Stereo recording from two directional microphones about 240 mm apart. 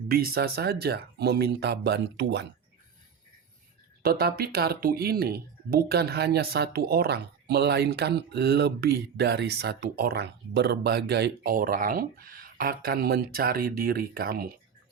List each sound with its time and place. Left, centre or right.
0.1 s speech: right
4.0 s speech: right